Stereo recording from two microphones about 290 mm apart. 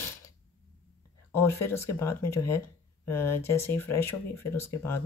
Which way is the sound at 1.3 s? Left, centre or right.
Centre.